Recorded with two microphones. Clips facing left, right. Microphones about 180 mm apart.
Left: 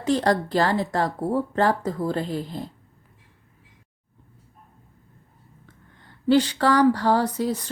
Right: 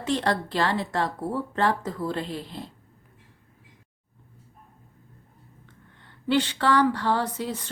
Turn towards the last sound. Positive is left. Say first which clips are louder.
# left 5 dB
turn(degrees=40)  # may be behind; listen again after turning